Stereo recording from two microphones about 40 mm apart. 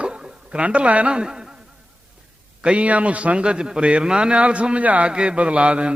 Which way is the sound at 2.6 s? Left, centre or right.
Right.